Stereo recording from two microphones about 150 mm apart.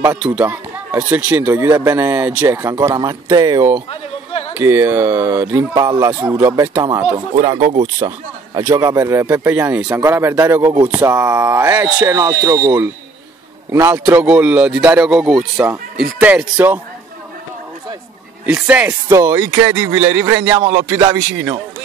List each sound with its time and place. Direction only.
0.2 s speech: 10° right (ahead or behind); by 3.6 s 25° right (ahead or behind)
3.9 s a sound: 40° left (ahead or behind)
4.6 s speech: 15° right (ahead or behind)
14.2 s speech: 5° right (ahead or behind)
18.4 s speech: 10° right (ahead or behind)